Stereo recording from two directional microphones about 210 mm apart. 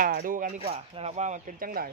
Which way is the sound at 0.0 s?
40° right (ahead or behind).